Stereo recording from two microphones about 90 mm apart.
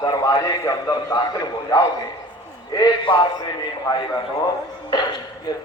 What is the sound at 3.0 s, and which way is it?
Speech, 70° left (ahead or behind).